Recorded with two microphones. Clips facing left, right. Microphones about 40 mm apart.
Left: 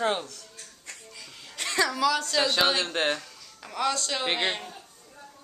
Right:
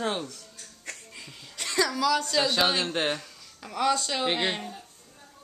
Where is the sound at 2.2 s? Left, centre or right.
Centre.